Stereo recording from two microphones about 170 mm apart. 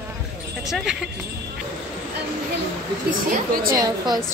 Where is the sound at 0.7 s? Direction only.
Centre (ahead or behind).